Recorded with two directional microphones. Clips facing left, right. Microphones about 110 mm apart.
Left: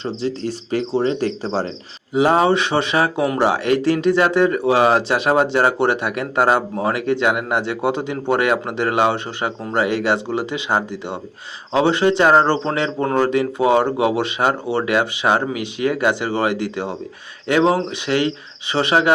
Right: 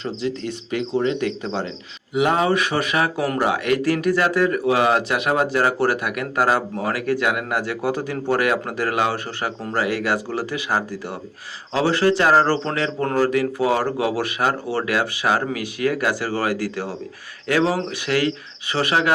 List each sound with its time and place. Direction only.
0.0 s speech: 30° left (ahead or behind)